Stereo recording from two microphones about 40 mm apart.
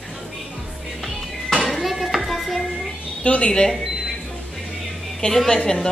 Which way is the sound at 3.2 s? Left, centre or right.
Left.